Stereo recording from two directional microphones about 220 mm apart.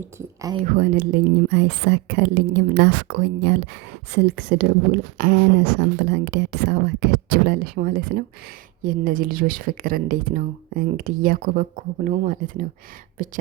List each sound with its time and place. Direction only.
0.6 s speech: 40° right (ahead or behind)